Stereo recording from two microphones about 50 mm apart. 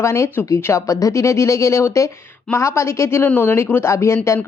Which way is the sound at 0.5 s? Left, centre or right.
Left.